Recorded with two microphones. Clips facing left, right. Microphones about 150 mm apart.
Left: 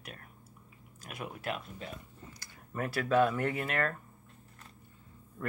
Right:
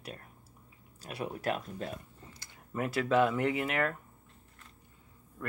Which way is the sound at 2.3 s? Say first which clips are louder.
Right 2 dB; 20° right (ahead or behind).